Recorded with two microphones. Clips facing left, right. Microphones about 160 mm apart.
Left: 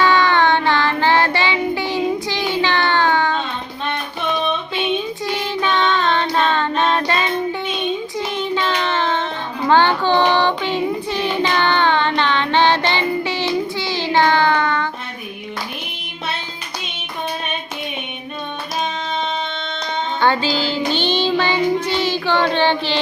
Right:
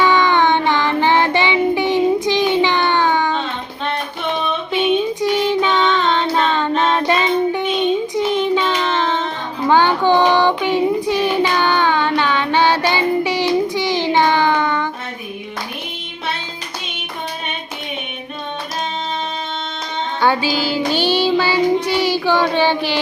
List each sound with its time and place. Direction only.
0.0 s child singing: 15° right (ahead or behind)
5.4 s child singing: 15° right (ahead or behind)
20.2 s child singing: 10° right (ahead or behind)